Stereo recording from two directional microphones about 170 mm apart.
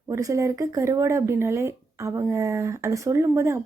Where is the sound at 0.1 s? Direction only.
20° right (ahead or behind).